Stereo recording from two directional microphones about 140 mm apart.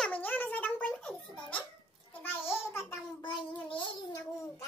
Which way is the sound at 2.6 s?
20° left (ahead or behind).